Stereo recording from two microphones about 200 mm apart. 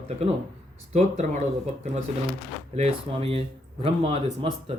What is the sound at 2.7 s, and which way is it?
Speech, 30° right (ahead or behind).